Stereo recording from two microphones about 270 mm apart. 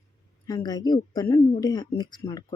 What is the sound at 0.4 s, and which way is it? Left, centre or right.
Speech, centre.